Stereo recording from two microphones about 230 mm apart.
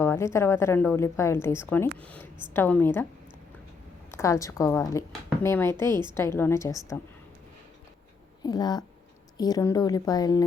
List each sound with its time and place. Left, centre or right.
0.0 s a woman's voice: centre
4.1 s a woman's voice: centre
8.4 s a woman's voice: centre